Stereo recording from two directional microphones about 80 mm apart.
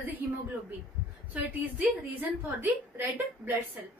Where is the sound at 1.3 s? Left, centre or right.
Right.